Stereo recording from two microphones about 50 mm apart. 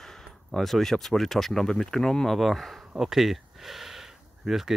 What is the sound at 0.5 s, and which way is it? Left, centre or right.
Speech, centre.